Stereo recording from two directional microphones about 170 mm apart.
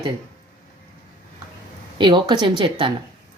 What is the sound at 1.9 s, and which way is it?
Speech, 25° right (ahead or behind).